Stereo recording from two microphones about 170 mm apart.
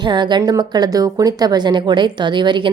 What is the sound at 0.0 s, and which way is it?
A woman's voice, 25° right (ahead or behind).